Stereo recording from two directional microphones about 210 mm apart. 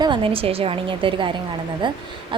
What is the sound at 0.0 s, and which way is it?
A woman's voice, 25° right (ahead or behind).